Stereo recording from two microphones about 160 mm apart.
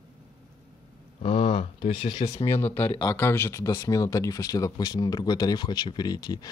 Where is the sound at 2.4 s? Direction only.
15° left (ahead or behind).